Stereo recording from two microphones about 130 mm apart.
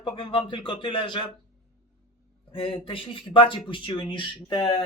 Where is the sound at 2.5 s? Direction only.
45° left (ahead or behind).